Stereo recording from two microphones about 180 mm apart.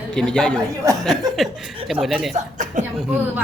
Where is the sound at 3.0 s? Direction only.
5° right (ahead or behind).